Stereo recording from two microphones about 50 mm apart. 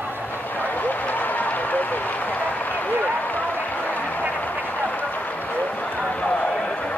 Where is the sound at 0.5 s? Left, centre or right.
Left.